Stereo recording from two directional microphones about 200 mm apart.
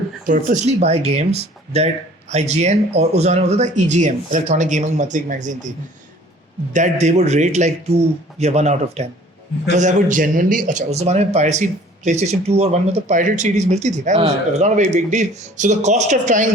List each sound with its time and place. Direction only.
0.3 s speech: 40° right (ahead or behind)
6.7 s speech: 35° right (ahead or behind)